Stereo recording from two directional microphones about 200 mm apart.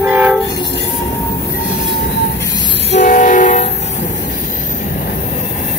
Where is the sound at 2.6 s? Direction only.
60° left (ahead or behind).